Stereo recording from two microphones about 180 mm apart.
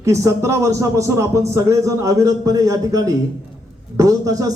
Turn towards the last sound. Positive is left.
turn(degrees=-20)  # may be behind; listen again after turning